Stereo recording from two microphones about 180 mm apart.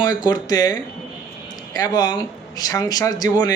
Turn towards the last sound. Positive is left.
turn(degrees=20)  # may be behind; listen again after turning